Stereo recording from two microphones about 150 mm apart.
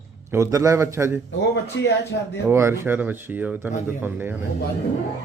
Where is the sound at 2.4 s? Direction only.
15° right (ahead or behind).